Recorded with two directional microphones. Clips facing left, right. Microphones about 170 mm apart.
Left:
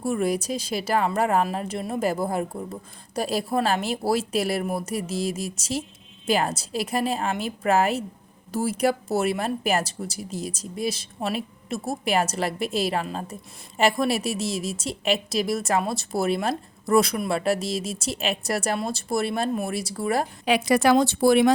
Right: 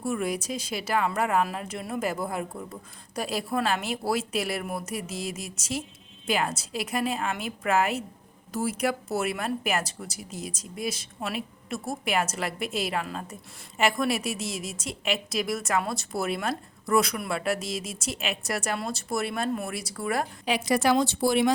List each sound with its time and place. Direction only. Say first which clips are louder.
0.0 s a woman's voice: left 4 dB; 35° left (ahead or behind)
20.4 s a woman's voice: left 5 dB; 65° left (ahead or behind)